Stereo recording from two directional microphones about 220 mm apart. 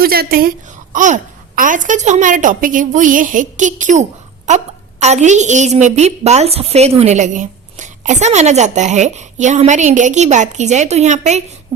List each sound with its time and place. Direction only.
0.0 s a woman's voice: 45° right (ahead or behind)